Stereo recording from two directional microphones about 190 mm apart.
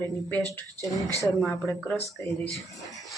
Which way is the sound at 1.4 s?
5° left (ahead or behind).